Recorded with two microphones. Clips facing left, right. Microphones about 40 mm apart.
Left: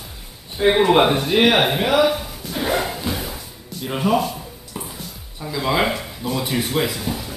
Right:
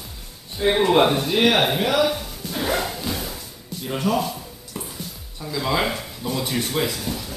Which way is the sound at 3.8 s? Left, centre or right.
Centre.